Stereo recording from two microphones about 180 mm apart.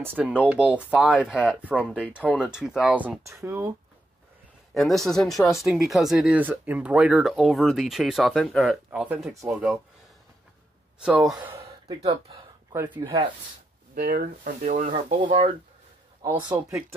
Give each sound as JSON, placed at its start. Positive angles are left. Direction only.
{"t": 0.0, "sound": "speech", "side_deg": -10}
{"t": 4.7, "sound": "speech", "side_deg": 0}
{"t": 11.0, "sound": "speech", "side_deg": -5}
{"t": 11.6, "sound": "gasp", "side_deg": -30}
{"t": 12.7, "sound": "speech", "side_deg": -10}
{"t": 13.0, "sound": "speech", "side_deg": -25}
{"t": 13.9, "sound": "speech", "side_deg": -55}